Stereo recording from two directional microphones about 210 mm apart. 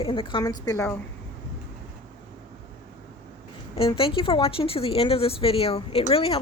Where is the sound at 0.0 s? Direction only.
25° left (ahead or behind).